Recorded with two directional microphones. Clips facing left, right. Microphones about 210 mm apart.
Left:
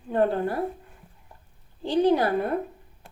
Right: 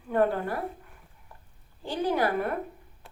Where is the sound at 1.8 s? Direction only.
20° left (ahead or behind).